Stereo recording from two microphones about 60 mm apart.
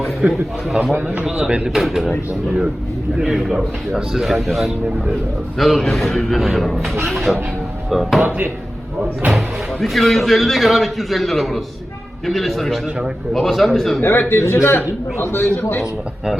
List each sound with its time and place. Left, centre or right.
0.2 s speech: centre
1.7 s a man's voice: centre
3.2 s a man's voice: centre
8.2 s speech: right
9.8 s a man's voice: centre
14.0 s a man's voice: left